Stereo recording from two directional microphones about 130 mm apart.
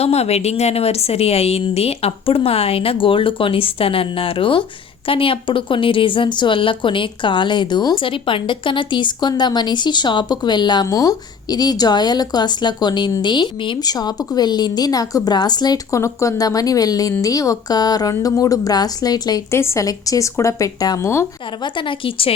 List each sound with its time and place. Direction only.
0.0 s a woman's voice: 55° left (ahead or behind); by 21.2 s 20° left (ahead or behind)
21.6 s a woman's voice: 40° left (ahead or behind)